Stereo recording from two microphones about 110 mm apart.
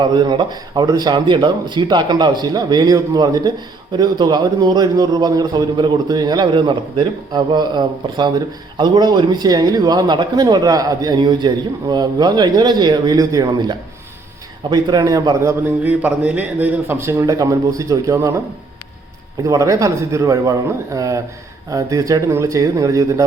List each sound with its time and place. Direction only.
0.0 s a man's voice: 40° right (ahead or behind); by 15.7 s 25° right (ahead or behind)
15.8 s speech: 15° right (ahead or behind); by 18.3 s 30° right (ahead or behind)
19.4 s a man's voice: 30° right (ahead or behind)